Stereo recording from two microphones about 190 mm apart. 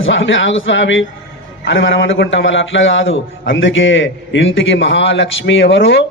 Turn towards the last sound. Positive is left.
turn(degrees=70)  # may be behind; listen again after turning